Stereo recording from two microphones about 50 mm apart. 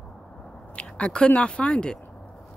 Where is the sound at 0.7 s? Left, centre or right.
Left.